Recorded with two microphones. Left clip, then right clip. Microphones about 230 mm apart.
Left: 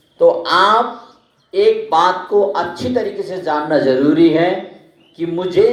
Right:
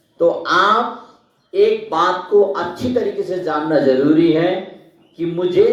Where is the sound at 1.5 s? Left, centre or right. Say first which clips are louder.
Left 2 dB; left.